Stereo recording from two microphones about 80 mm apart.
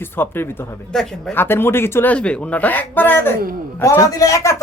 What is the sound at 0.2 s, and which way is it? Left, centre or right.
Speech, left.